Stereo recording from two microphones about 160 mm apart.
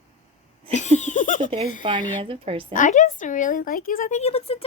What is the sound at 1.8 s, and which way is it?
Speech, 30° right (ahead or behind).